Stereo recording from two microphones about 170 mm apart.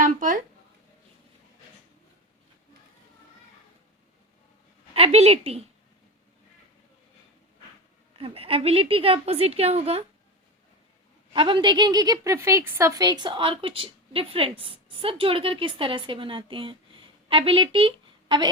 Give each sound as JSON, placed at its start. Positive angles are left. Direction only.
{"t": 0.0, "sound": "a sound", "side_deg": -50}
{"t": 4.9, "sound": "a woman's voice", "side_deg": -35}
{"t": 8.1, "sound": "a woman's voice", "side_deg": -35}
{"t": 11.3, "sound": "a woman's voice", "side_deg": -30}